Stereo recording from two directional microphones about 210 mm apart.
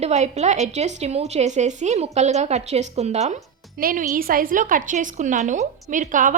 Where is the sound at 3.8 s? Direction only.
45° right (ahead or behind).